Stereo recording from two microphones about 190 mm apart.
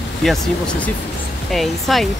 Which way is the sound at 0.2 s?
5° left (ahead or behind).